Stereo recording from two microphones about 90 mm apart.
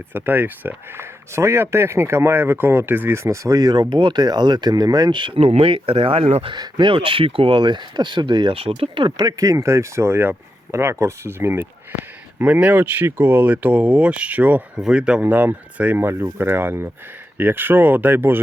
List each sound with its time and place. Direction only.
0.1 s speech: 20° right (ahead or behind); by 6.6 s 85° right
6.6 s speech: 60° right (ahead or behind)
9.2 s speech: 40° right (ahead or behind)
12.4 s speech: 15° right (ahead or behind)